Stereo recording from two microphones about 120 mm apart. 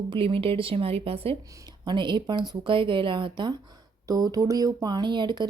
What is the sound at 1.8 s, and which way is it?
Speech, 40° right (ahead or behind).